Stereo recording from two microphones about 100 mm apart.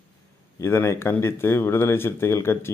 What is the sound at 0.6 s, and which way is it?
A man's voice, 25° left (ahead or behind).